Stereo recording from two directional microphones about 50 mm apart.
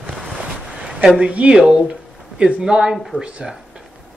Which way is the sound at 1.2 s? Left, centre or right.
Right.